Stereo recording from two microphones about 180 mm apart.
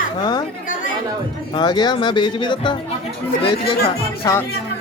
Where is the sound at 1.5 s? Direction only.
25° left (ahead or behind).